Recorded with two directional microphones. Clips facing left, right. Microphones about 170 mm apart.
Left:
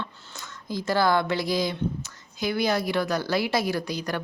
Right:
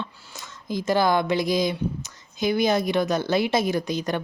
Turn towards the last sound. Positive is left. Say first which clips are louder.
# right 3 dB
turn(degrees=-20)  # may be behind; listen again after turning